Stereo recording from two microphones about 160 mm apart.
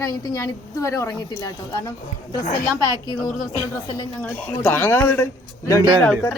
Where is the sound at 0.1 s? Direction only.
20° left (ahead or behind).